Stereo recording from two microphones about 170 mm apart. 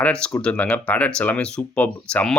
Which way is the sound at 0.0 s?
5° left (ahead or behind).